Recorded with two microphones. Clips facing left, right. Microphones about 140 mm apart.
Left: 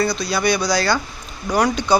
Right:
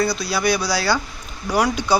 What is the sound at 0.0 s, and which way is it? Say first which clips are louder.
Speech: left 1 dB; 5° right (ahead or behind).